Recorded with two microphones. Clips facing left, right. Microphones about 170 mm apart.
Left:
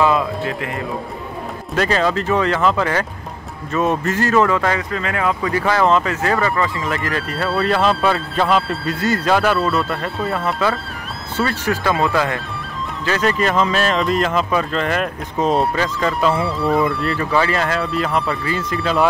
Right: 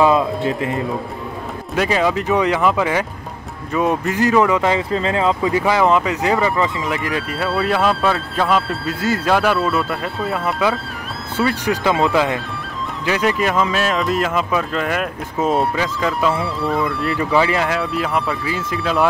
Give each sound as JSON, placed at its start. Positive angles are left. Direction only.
{"t": 0.0, "sound": "speech", "side_deg": -25}
{"t": 1.8, "sound": "speech", "side_deg": -10}
{"t": 6.9, "sound": "speech", "side_deg": -5}
{"t": 11.3, "sound": "speech", "side_deg": -15}
{"t": 17.2, "sound": "speech", "side_deg": -15}